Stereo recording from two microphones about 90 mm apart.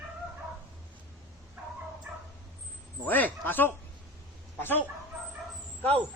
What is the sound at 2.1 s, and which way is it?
Dog, 20° right (ahead or behind).